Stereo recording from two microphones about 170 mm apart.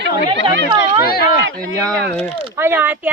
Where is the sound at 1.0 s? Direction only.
60° left (ahead or behind).